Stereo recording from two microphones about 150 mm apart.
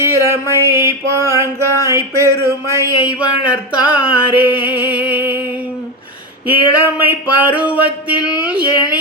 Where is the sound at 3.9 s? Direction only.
10° right (ahead or behind).